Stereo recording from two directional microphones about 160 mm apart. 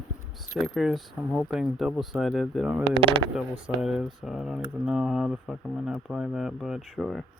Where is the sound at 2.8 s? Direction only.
35° right (ahead or behind).